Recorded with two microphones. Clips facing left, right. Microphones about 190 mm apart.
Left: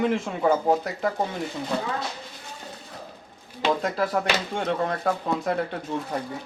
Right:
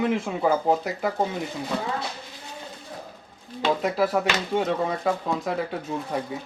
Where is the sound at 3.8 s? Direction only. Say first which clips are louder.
Right 2 dB; 5° right (ahead or behind).